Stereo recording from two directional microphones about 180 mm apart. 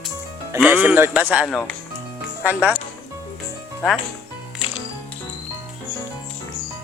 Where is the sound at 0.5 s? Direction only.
10° right (ahead or behind).